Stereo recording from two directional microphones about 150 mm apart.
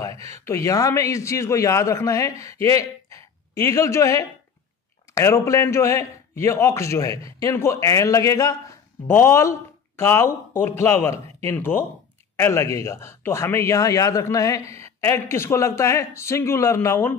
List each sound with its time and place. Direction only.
0.3 s a man's voice: 20° left (ahead or behind)